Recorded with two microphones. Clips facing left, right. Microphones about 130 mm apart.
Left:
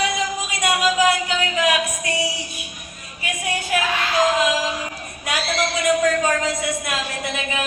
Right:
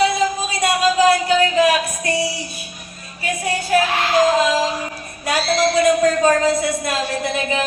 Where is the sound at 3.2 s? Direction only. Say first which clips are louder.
Right 4 dB; 35° right (ahead or behind).